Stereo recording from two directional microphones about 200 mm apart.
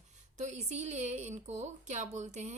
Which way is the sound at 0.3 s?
35° right (ahead or behind).